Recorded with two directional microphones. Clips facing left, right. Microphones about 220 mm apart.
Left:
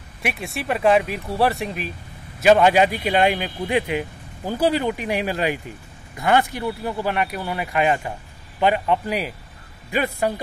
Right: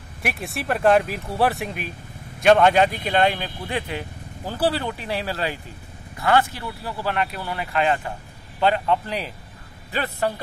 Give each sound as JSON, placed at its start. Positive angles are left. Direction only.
{"t": 0.2, "sound": "speech", "side_deg": 0}